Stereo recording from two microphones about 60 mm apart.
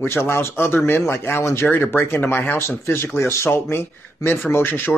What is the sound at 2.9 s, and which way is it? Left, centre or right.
A man's voice, left.